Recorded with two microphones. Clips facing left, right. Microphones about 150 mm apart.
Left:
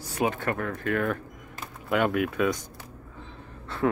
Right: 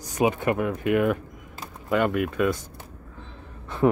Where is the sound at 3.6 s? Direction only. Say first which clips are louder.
Right 5 dB; 20° right (ahead or behind).